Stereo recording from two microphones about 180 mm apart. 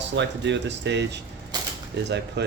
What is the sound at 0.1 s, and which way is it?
Speech, 75° right (ahead or behind).